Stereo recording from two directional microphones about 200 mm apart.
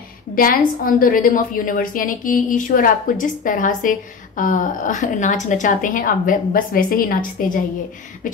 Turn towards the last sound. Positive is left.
turn(degrees=45)  # may be behind; listen again after turning